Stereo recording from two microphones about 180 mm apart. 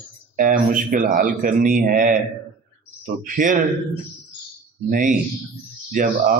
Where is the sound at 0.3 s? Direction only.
50° right (ahead or behind).